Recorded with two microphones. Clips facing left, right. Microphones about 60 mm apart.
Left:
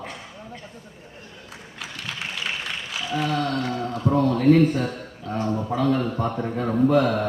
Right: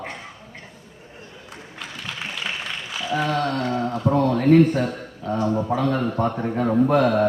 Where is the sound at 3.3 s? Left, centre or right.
Right.